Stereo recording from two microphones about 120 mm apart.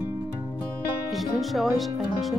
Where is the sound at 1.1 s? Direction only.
Centre (ahead or behind).